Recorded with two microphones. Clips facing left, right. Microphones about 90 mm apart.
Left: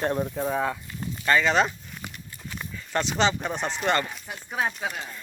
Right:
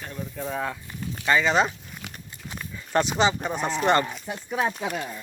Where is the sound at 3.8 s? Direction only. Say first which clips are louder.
Right 4 dB; 20° right (ahead or behind).